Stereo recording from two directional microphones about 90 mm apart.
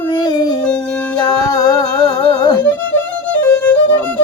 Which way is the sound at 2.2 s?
45° left (ahead or behind).